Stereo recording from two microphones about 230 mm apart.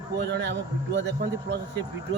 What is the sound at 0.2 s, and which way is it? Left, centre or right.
Speech, right.